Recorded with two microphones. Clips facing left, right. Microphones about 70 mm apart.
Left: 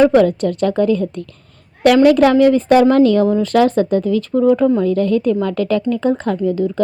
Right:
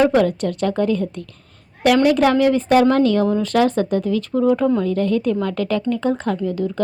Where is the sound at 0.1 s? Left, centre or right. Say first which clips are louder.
Left 4 dB; left.